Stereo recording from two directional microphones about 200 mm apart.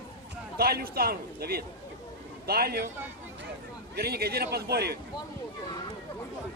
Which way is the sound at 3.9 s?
50° right (ahead or behind).